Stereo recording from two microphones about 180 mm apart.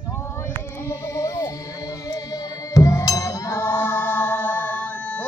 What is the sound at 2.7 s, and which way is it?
Music, 20° left (ahead or behind).